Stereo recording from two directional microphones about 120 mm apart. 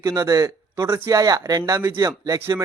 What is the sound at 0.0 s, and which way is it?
A man's voice, 30° right (ahead or behind).